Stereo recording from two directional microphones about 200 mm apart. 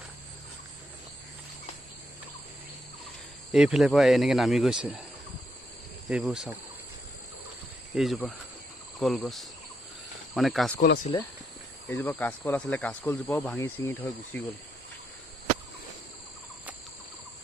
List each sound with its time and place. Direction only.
3.5 s speech: 5° right (ahead or behind)
6.0 s speech: 5° right (ahead or behind)
7.9 s speech: centre (ahead or behind)
11.1 s speech: 20° left (ahead or behind)
11.9 s speech: 10° left (ahead or behind)